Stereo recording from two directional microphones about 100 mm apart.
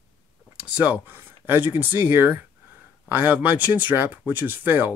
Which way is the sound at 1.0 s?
20° right (ahead or behind).